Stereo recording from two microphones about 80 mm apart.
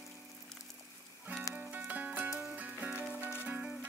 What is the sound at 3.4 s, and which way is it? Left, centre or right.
Music, centre.